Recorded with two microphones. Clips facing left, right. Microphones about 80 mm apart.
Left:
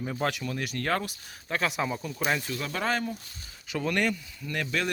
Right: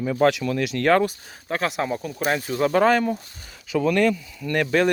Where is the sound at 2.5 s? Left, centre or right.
Right.